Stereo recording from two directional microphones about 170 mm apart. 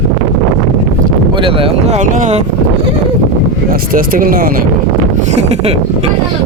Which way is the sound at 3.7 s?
60° right (ahead or behind).